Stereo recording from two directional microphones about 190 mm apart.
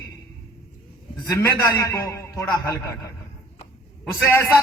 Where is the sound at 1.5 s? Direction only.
15° left (ahead or behind).